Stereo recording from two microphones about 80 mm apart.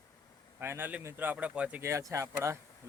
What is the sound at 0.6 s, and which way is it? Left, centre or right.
A man's voice, right.